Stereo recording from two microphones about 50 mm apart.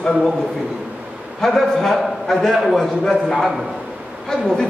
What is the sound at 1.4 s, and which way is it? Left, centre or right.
A man's voice, centre.